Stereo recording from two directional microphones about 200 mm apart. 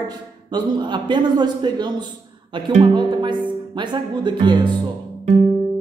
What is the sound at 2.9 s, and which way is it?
Speech, 20° right (ahead or behind).